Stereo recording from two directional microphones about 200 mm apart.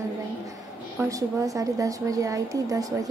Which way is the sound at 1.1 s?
15° right (ahead or behind).